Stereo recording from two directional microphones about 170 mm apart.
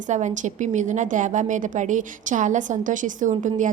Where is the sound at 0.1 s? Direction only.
45° right (ahead or behind).